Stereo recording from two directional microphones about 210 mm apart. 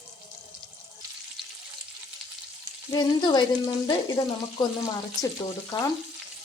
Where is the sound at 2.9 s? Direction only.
20° left (ahead or behind).